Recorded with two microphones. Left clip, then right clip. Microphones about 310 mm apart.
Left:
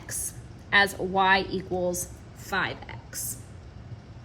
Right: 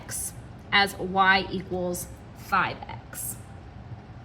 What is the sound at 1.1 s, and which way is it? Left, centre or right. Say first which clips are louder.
Speech: right 2 dB; centre.